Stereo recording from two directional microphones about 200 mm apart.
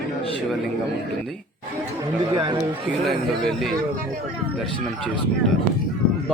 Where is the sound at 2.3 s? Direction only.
20° right (ahead or behind).